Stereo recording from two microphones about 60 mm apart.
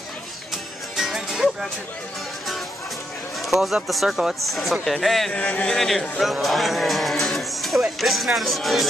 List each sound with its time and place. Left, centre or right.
0.9 s music: centre
3.4 s speech: centre
5.3 s speech: centre
5.7 s speech: centre